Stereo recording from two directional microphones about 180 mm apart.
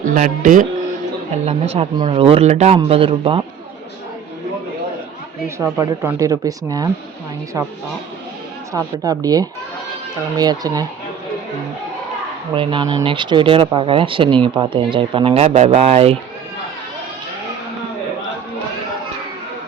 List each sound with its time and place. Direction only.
0.0 s speech: 45° right (ahead or behind)
1.5 s speech: 35° right (ahead or behind)
5.5 s speech: 15° right (ahead or behind)
8.7 s speech: 20° right (ahead or behind)
12.5 s speech: 30° right (ahead or behind)